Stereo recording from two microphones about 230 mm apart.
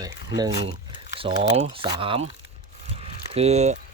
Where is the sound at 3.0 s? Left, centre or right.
Right.